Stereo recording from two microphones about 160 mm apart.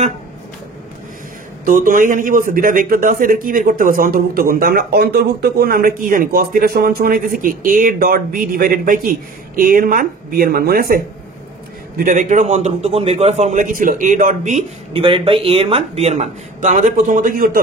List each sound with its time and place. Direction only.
1.7 s speech: 55° right (ahead or behind); by 11.0 s 70° right (ahead or behind)
12.0 s a man's voice: 55° right (ahead or behind)
14.9 s speech: 35° right (ahead or behind); by 17.5 s 60° right (ahead or behind)